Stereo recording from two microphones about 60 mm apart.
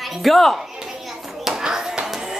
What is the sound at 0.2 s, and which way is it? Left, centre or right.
Speech, centre.